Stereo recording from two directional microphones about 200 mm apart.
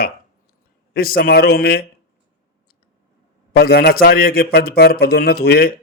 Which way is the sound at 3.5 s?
50° left (ahead or behind).